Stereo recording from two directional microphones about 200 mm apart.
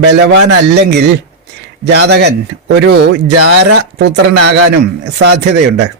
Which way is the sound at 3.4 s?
60° right (ahead or behind).